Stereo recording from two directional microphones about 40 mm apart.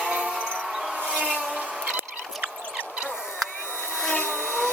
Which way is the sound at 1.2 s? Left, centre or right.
Right.